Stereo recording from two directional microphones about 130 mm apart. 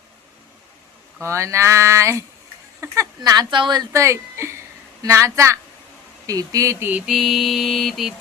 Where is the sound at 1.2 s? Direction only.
20° right (ahead or behind).